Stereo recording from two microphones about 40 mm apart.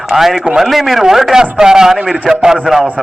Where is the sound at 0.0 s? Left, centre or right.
Centre.